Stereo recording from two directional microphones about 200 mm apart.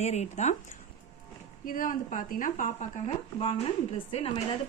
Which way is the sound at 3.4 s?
30° left (ahead or behind).